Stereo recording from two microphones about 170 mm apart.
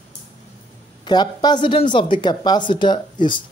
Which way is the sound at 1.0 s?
25° left (ahead or behind).